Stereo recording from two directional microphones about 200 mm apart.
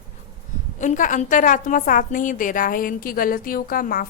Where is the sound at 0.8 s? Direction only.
40° left (ahead or behind).